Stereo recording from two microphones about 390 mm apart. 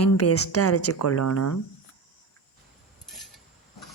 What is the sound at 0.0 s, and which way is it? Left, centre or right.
Speech, left.